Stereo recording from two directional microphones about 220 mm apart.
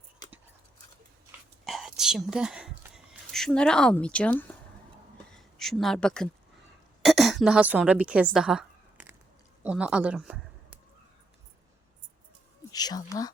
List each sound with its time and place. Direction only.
1.6 s whispering: centre (ahead or behind)
5.3 s a sound: centre (ahead or behind)
7.0 s a woman's voice: centre (ahead or behind)
12.7 s speech: 15° left (ahead or behind)